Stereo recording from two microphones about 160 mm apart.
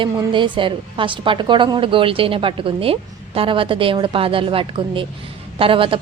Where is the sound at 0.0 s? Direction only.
30° right (ahead or behind).